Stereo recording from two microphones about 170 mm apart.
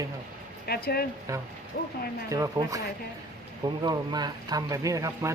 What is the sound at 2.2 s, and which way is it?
Speech, 20° right (ahead or behind).